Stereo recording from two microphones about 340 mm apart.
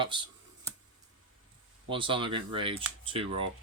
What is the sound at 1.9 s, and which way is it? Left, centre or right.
Speech, centre.